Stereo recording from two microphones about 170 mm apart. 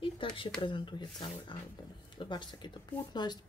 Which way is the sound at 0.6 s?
30° left (ahead or behind).